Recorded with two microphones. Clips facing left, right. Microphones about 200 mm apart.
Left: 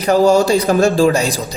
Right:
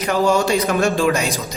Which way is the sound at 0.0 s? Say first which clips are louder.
Left 6 dB; 35° left (ahead or behind).